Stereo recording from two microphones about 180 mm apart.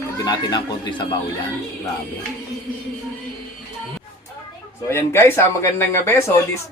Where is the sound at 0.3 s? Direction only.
25° left (ahead or behind).